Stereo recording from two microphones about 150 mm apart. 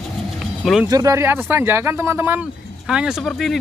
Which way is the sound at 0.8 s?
25° right (ahead or behind).